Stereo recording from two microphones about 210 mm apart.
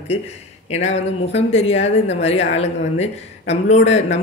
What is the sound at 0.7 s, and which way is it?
Speech, 30° left (ahead or behind).